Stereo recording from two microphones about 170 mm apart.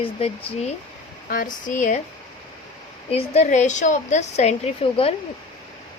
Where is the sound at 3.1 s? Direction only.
35° left (ahead or behind).